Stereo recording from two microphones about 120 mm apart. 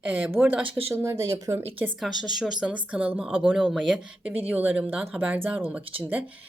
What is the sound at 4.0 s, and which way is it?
Speech, 10° right (ahead or behind).